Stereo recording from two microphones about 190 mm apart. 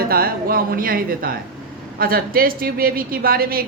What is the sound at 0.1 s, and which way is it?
A woman's voice, 50° right (ahead or behind).